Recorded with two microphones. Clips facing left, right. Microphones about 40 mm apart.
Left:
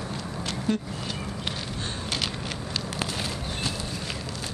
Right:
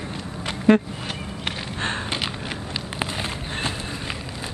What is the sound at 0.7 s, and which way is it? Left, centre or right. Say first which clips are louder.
Speech: right 12 dB; right.